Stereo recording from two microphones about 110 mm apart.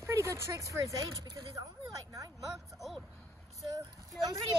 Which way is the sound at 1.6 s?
35° right (ahead or behind).